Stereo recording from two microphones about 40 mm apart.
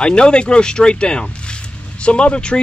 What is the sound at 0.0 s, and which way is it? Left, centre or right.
Speech, left.